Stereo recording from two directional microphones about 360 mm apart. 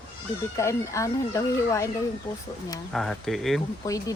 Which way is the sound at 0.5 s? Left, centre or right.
Centre.